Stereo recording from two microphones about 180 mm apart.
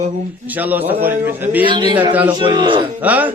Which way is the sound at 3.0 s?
10° right (ahead or behind).